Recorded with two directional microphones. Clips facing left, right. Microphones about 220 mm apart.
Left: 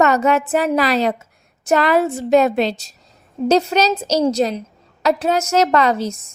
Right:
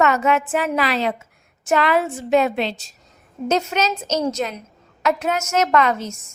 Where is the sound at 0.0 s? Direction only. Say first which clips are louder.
Left 3 dB; 40° left (ahead or behind).